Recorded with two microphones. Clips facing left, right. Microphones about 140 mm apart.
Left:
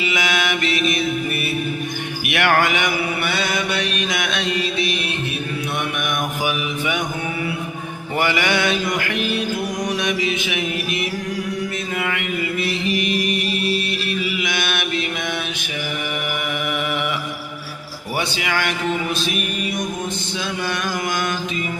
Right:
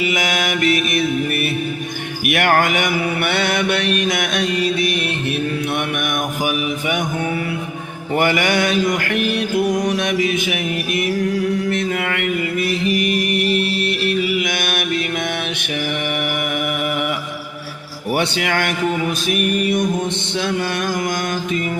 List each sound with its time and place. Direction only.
0.0 s mantra: 45° right (ahead or behind)
2.2 s mantra: 45° right (ahead or behind)
8.1 s mantra: 50° right (ahead or behind)
10.0 s speech: 55° right (ahead or behind)
10.3 s mantra: 50° right (ahead or behind)
11.7 s mantra: 60° right (ahead or behind)
12.6 s music: 45° right (ahead or behind)
16.0 s mantra: 60° right (ahead or behind)
18.1 s speech: 60° right (ahead or behind)
19.2 s mantra: 55° right (ahead or behind)